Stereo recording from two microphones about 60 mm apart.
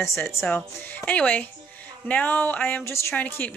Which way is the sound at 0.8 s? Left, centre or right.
Left.